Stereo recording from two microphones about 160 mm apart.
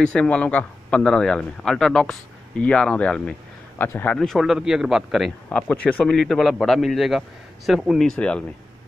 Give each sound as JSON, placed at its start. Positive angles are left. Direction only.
{"t": 0.0, "sound": "speech", "side_deg": 5}